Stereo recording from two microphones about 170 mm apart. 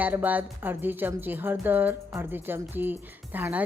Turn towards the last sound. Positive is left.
turn(degrees=-10)  # may be behind; listen again after turning